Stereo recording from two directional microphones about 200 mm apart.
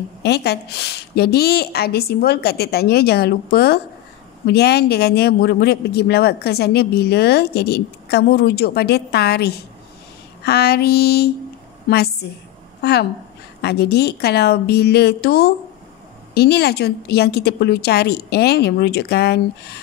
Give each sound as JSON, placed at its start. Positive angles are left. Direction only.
{"t": 0.2, "sound": "a woman's voice", "side_deg": 55}